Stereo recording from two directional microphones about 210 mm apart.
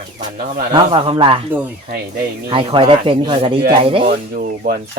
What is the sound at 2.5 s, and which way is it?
Speech, 25° right (ahead or behind).